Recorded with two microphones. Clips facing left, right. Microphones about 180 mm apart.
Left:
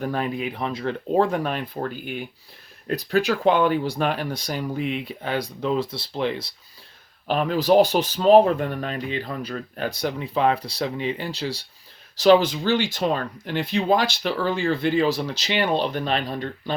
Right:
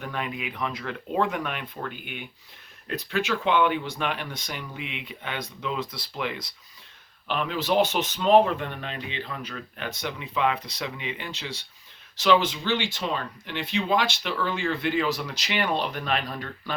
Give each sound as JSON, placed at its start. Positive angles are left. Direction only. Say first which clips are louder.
{"t": 0.0, "sound": "speech", "louder": "left 7 dB", "side_deg": 35}
{"t": 7.3, "sound": "speech", "louder": "left 7 dB", "side_deg": 40}